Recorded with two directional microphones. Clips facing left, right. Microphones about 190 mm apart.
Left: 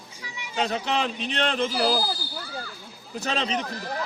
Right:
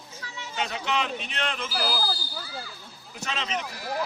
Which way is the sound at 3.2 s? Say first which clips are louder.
Left 4 dB; 35° left (ahead or behind).